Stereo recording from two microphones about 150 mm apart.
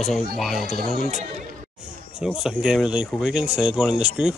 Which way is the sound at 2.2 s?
5° right (ahead or behind).